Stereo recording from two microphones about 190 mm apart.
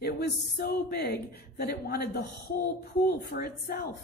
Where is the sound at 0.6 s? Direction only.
55° left (ahead or behind).